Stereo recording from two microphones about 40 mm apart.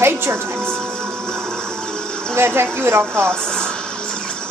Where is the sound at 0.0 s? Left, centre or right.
Right.